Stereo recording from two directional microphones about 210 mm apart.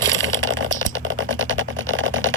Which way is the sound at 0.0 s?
60° right (ahead or behind).